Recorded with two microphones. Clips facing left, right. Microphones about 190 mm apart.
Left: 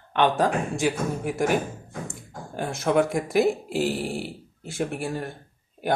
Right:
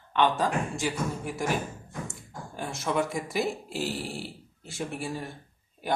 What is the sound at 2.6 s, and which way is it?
Speech, 60° left (ahead or behind).